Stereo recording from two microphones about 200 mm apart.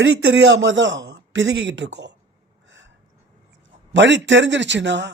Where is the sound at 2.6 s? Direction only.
70° right (ahead or behind).